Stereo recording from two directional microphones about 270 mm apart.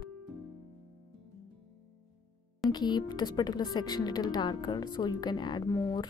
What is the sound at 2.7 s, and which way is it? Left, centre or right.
Speech, centre.